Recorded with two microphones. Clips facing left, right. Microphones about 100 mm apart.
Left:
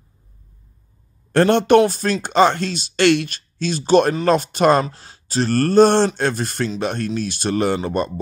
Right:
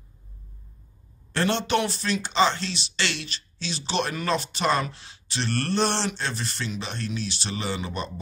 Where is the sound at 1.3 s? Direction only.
55° left (ahead or behind).